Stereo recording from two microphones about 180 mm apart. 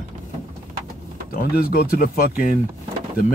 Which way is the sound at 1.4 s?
55° left (ahead or behind).